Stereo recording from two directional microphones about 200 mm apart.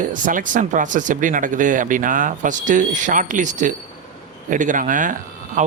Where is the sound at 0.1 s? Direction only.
40° right (ahead or behind).